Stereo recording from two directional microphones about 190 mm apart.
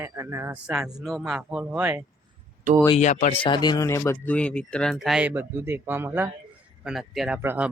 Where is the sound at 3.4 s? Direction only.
25° left (ahead or behind); by 7.4 s centre (ahead or behind).